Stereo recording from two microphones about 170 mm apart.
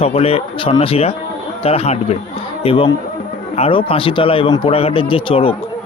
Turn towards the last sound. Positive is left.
turn(degrees=30)  # may be behind; listen again after turning